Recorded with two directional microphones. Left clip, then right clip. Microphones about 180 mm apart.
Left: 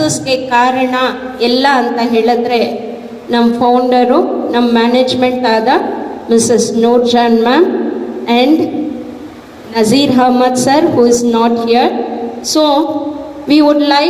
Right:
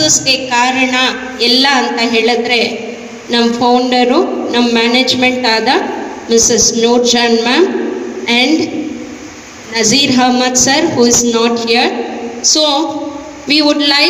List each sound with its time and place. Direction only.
0.0 s a woman's voice: 45° left (ahead or behind)
9.7 s a woman's voice: 55° left (ahead or behind)